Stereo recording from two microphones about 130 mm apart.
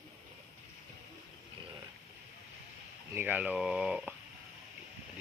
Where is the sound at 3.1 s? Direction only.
15° right (ahead or behind).